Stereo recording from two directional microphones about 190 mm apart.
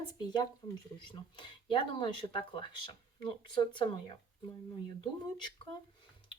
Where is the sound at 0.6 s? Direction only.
25° left (ahead or behind).